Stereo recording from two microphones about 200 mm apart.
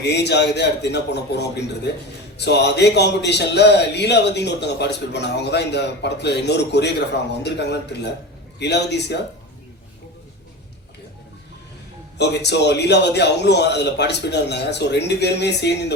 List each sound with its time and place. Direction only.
0.0 s speech: 55° left (ahead or behind)
12.1 s speech: 55° left (ahead or behind)